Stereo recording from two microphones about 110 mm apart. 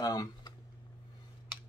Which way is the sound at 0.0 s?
35° left (ahead or behind).